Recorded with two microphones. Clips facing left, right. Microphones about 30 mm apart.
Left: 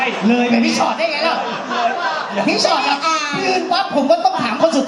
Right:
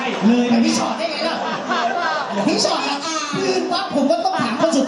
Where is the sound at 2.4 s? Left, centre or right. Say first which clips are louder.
Left 5 dB; left.